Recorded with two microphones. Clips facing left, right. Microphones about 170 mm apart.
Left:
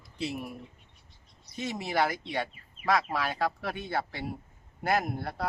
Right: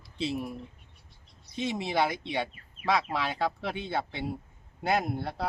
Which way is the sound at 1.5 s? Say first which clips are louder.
Right 1 dB; centre (ahead or behind).